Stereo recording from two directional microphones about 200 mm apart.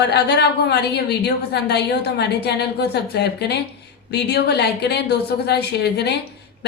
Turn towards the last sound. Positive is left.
turn(degrees=55)  # may be behind; listen again after turning